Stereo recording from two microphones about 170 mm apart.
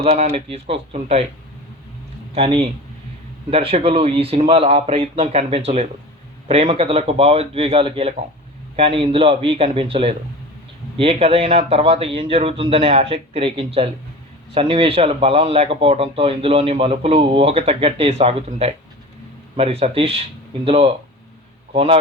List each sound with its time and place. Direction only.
0.0 s speech: 40° right (ahead or behind)
2.3 s a man's voice: 35° right (ahead or behind)